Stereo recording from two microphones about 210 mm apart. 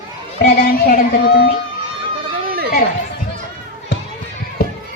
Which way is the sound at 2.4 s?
45° right (ahead or behind).